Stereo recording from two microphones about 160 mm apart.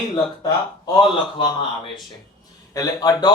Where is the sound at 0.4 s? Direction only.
25° left (ahead or behind).